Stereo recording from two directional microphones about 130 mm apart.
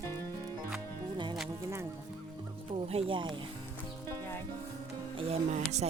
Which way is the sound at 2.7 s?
50° right (ahead or behind).